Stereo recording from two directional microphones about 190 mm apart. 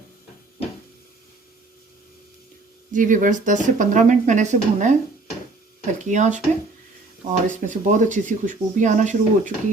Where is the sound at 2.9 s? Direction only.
45° right (ahead or behind).